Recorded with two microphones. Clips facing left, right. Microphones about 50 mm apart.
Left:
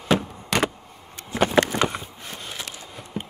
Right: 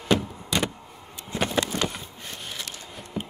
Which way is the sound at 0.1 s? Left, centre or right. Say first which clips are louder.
Left 2 dB; left.